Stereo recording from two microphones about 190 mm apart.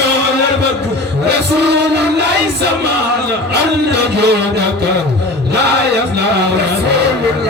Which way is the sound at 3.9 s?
60° right (ahead or behind).